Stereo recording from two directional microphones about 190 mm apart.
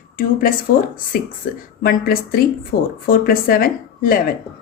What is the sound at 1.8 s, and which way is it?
A woman's voice, 50° left (ahead or behind).